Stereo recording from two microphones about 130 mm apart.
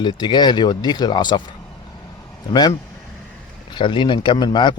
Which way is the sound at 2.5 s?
30° left (ahead or behind).